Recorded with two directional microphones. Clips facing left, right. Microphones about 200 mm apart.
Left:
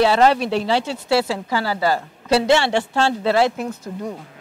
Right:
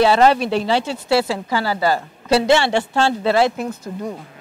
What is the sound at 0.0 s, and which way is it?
Speech, 10° right (ahead or behind).